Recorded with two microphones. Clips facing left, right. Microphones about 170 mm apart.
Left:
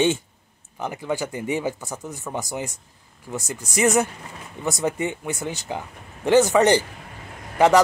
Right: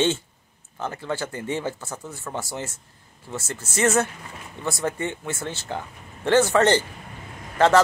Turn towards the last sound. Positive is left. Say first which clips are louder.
# left 2 dB
turn(degrees=15)  # may be behind; listen again after turning